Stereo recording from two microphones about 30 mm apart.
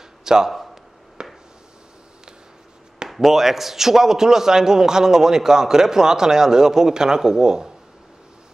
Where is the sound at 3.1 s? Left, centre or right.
Centre; by 7.7 s right.